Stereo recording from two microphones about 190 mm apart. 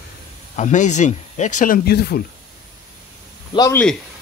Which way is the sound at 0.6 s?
40° left (ahead or behind).